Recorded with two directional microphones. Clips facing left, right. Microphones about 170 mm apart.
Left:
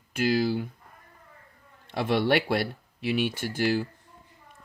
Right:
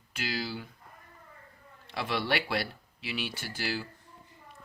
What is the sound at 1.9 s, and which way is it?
Speech, 50° left (ahead or behind).